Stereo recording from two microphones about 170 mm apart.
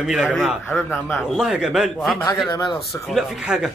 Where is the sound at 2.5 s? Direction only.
25° left (ahead or behind).